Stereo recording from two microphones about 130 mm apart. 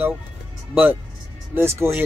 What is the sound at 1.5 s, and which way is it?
Speech, 20° right (ahead or behind).